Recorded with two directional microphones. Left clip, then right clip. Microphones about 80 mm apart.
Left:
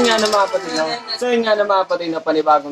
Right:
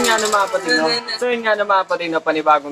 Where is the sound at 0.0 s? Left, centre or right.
Left.